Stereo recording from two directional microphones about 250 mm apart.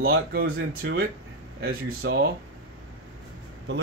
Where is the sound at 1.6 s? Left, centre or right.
Right.